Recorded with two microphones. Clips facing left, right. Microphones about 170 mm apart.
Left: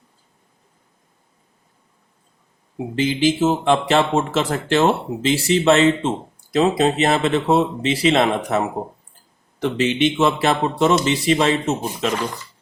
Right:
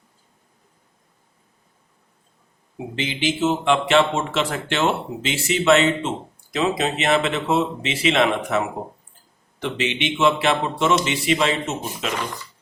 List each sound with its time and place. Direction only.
2.9 s speech: 40° left (ahead or behind)